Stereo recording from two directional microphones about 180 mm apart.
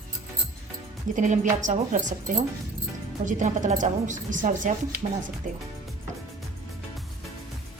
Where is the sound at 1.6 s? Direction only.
45° right (ahead or behind).